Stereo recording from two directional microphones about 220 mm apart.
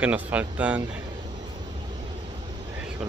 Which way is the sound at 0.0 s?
5° right (ahead or behind).